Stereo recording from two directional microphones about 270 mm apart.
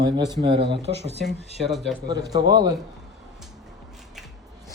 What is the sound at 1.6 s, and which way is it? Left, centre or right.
Speech, centre.